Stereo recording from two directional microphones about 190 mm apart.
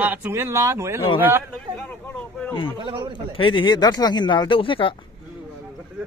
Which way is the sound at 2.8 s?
25° right (ahead or behind).